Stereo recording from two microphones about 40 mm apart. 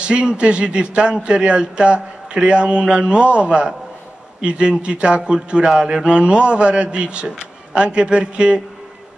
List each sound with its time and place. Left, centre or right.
0.0 s speech: right